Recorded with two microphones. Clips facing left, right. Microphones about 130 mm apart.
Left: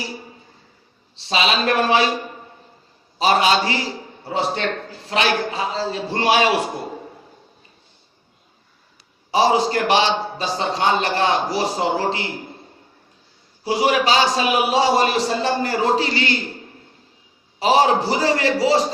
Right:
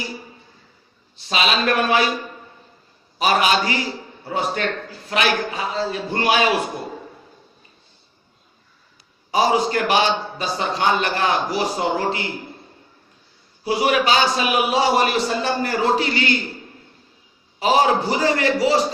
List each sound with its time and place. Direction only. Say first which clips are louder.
1.1 s a man's voice: left 1 dB; 30° left (ahead or behind)
3.2 s a man's voice: left 1 dB; 30° left (ahead or behind)
9.3 s a man's voice: left 1 dB; 30° left (ahead or behind)
13.7 s a man's voice: left 1 dB; 30° left (ahead or behind)
17.6 s a man's voice: left 1 dB; 30° left (ahead or behind)